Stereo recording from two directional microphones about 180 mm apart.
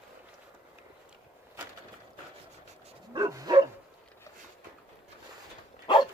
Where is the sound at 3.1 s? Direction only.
20° right (ahead or behind).